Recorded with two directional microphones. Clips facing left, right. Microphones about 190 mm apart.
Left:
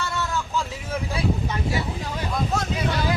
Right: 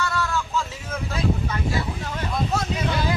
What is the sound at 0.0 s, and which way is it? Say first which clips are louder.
Vehicle: right 2 dB; 25° left (ahead or behind).